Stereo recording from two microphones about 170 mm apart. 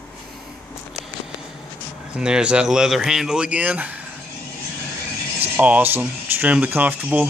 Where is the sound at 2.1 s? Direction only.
5° right (ahead or behind).